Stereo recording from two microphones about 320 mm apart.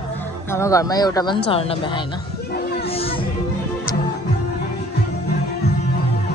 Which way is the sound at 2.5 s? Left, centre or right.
Left.